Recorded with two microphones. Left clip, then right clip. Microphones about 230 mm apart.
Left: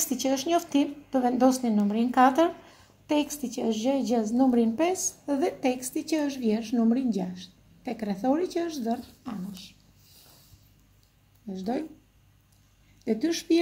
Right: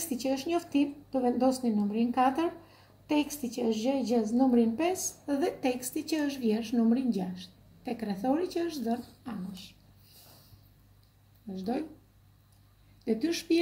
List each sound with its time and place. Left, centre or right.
0.0 s a woman's voice: left
11.5 s a woman's voice: left
13.0 s a woman's voice: left